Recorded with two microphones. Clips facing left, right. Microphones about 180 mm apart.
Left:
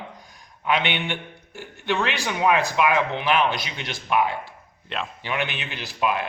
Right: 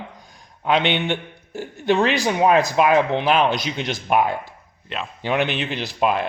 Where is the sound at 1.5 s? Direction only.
40° right (ahead or behind).